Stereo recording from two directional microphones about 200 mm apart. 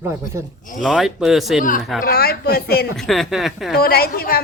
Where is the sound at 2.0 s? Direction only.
50° left (ahead or behind).